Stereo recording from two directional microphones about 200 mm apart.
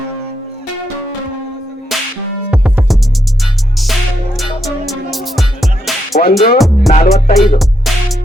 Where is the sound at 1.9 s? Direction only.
Centre (ahead or behind).